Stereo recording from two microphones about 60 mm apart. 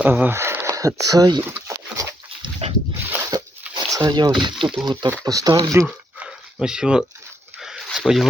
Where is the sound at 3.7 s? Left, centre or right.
Right.